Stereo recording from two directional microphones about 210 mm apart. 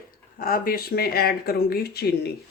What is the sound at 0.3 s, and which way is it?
Speech, 45° left (ahead or behind).